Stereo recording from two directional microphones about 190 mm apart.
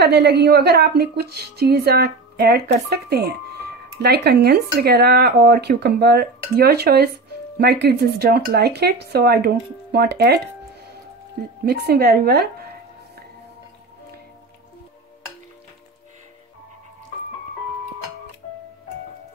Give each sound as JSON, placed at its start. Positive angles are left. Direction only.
{"t": 0.0, "sound": "a woman's voice", "side_deg": -60}
{"t": 11.6, "sound": "a woman's voice", "side_deg": -55}